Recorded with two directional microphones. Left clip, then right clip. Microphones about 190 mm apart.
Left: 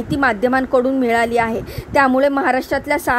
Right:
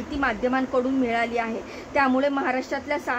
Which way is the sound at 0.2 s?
45° left (ahead or behind).